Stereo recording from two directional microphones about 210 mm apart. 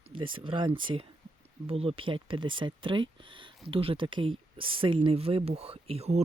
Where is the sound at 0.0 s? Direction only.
25° right (ahead or behind).